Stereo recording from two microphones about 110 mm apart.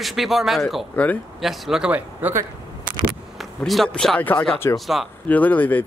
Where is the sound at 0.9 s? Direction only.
15° left (ahead or behind).